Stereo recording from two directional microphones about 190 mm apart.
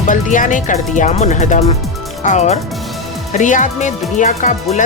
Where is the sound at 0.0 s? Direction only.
40° left (ahead or behind).